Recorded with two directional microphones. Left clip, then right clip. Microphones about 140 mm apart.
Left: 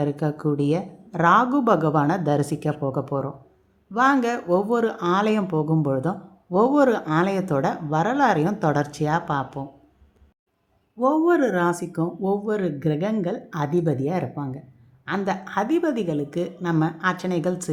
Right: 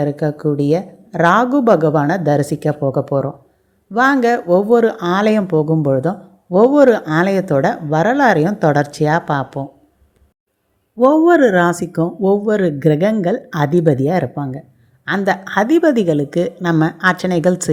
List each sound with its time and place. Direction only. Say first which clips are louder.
0.0 s a woman's voice: right 7 dB; 20° right (ahead or behind)
11.0 s a woman's voice: right 9 dB; 35° right (ahead or behind)